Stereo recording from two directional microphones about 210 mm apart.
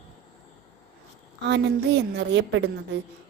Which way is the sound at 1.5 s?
55° right (ahead or behind).